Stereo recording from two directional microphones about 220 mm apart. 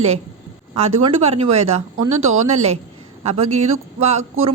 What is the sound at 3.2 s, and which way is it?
Speech, 30° right (ahead or behind).